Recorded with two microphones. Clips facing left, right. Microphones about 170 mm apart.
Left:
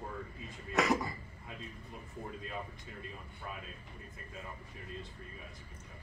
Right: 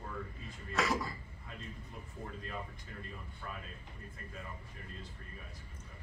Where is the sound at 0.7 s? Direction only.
20° left (ahead or behind).